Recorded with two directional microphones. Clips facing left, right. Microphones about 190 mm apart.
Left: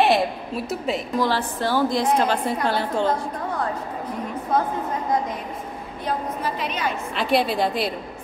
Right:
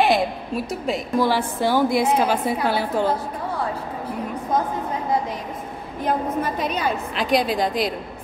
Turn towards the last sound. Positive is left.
turn(degrees=0)  # may be behind; listen again after turning